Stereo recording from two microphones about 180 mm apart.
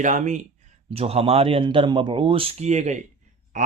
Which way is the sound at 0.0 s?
45° right (ahead or behind).